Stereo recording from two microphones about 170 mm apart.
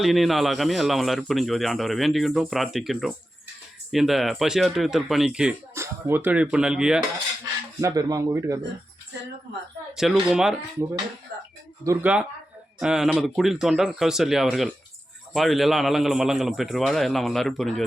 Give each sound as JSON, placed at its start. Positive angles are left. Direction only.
{"t": 0.0, "sound": "speech", "side_deg": 0}
{"t": 7.4, "sound": "speech", "side_deg": -20}
{"t": 9.9, "sound": "speech", "side_deg": -5}
{"t": 11.8, "sound": "speech", "side_deg": -20}
{"t": 12.8, "sound": "speech", "side_deg": -5}